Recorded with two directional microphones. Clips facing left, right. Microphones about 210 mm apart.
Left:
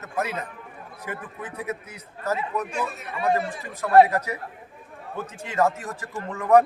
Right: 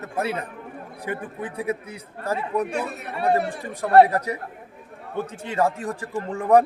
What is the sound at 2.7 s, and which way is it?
Speech, 65° right (ahead or behind).